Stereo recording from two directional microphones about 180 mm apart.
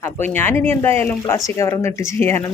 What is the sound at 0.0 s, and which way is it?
Speech, 10° left (ahead or behind).